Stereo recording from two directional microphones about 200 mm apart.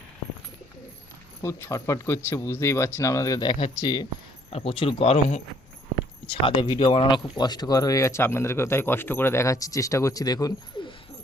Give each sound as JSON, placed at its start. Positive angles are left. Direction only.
{"t": 1.4, "sound": "speech", "side_deg": 15}